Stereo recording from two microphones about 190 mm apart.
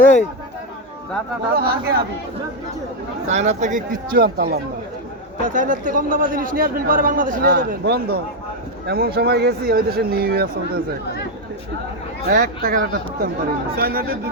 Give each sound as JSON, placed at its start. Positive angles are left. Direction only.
{"t": 0.0, "sound": "speech", "side_deg": 40}
{"t": 1.5, "sound": "a man's voice", "side_deg": -55}
{"t": 3.2, "sound": "a man's voice", "side_deg": -35}
{"t": 5.5, "sound": "a man's voice", "side_deg": -45}
{"t": 12.3, "sound": "a man's voice", "side_deg": -50}